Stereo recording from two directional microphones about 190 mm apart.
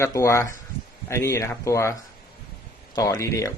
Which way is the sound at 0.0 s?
15° left (ahead or behind).